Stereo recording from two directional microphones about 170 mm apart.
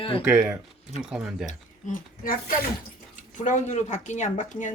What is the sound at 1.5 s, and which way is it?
Speech, 55° left (ahead or behind).